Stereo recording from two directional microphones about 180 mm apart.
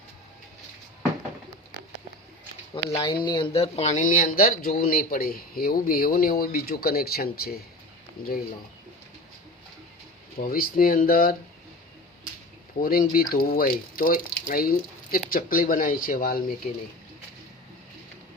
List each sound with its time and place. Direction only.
2.7 s speech: 25° left (ahead or behind); by 7.5 s 55° left (ahead or behind)
10.3 s speech: 55° left (ahead or behind)
12.8 s speech: 55° left (ahead or behind)